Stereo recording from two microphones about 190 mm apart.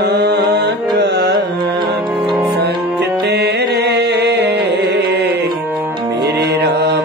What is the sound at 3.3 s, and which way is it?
Music, 60° right (ahead or behind).